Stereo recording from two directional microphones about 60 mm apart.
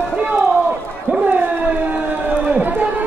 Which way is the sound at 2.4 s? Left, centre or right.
Right.